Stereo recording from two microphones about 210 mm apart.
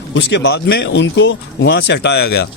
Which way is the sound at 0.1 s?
55° left (ahead or behind).